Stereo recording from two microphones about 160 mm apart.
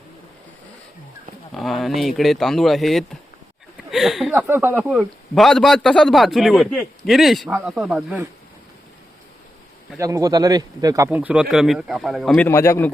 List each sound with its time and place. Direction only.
1.5 s a man's voice: centre (ahead or behind)
4.3 s a man's voice: 15° right (ahead or behind)
10.0 s speech: 20° right (ahead or behind)
11.1 s a man's voice: 10° right (ahead or behind)
12.5 s a man's voice: 15° left (ahead or behind)